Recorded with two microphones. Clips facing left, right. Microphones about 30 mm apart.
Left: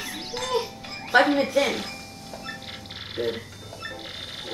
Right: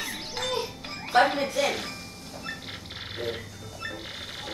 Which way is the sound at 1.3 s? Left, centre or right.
Left.